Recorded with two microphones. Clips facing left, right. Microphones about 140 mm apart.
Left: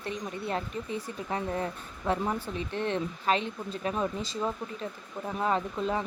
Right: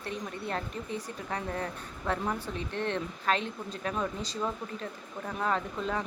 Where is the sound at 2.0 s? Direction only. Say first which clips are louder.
Left 3 dB; 15° left (ahead or behind).